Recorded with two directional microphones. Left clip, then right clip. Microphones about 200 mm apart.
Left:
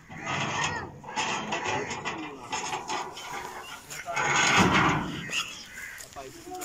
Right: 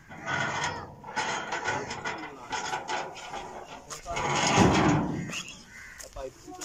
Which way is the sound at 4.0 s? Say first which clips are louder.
Left 3 dB; 10° right (ahead or behind).